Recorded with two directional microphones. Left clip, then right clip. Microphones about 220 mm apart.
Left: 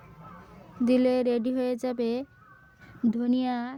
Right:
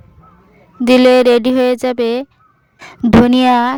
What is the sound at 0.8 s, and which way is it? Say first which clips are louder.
Speech: right 16 dB; 45° right (ahead or behind).